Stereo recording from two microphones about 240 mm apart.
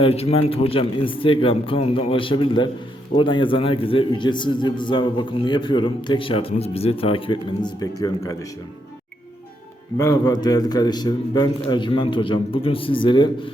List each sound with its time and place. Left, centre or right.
0.0 s a man's voice: left
10.0 s a man's voice: centre